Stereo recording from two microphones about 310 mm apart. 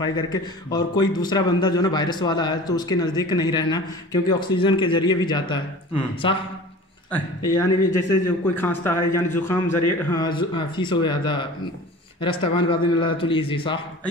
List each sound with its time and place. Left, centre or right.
0.0 s a man's voice: centre